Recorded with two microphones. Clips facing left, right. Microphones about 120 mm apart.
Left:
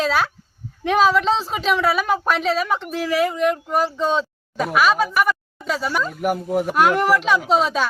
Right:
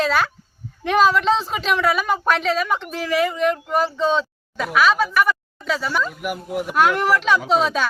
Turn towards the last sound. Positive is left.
turn(degrees=0)  # may be behind; listen again after turning